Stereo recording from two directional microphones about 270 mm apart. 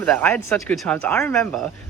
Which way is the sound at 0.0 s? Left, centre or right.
Centre.